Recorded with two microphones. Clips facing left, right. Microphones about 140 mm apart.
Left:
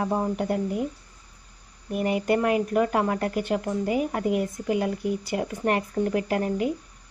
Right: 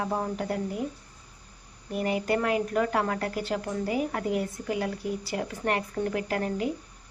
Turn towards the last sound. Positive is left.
turn(degrees=20)  # may be behind; listen again after turning